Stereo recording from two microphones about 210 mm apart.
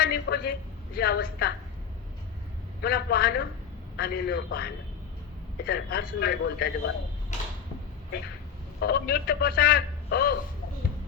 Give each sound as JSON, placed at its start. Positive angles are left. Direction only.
{"t": 0.0, "sound": "a sound", "side_deg": 50}
{"t": 0.9, "sound": "a man's voice", "side_deg": 50}
{"t": 2.8, "sound": "a man's voice", "side_deg": 50}
{"t": 8.8, "sound": "a man's voice", "side_deg": 50}